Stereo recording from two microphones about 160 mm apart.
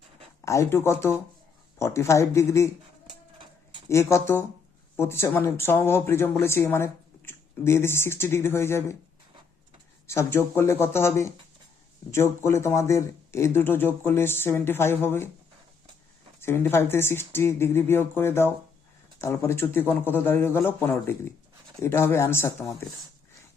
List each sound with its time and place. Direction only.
0.4 s speech: 15° left (ahead or behind)
3.3 s a sound: 30° right (ahead or behind)
3.8 s speech: 20° left (ahead or behind)
10.1 s speech: 15° left (ahead or behind)
16.4 s speech: 15° left (ahead or behind)